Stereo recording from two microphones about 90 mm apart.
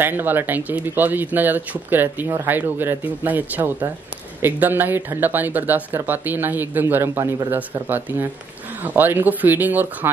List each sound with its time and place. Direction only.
0.0 s speech: 20° right (ahead or behind)